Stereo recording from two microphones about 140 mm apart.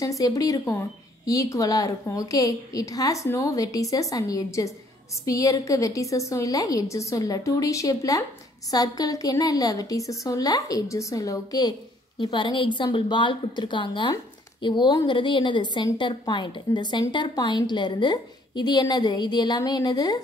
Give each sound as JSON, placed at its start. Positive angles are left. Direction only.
{"t": 0.0, "sound": "a woman's voice", "side_deg": 25}
{"t": 14.1, "sound": "a sound", "side_deg": 35}
{"t": 15.0, "sound": "a woman's voice", "side_deg": 35}